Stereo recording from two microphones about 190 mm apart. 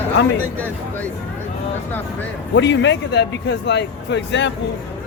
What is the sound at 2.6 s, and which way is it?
Speech, 70° left (ahead or behind).